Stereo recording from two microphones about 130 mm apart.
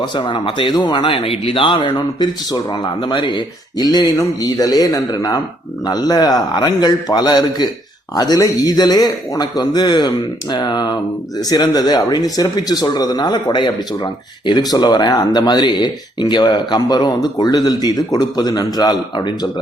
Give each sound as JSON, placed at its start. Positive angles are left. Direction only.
{"t": 0.0, "sound": "speech", "side_deg": 35}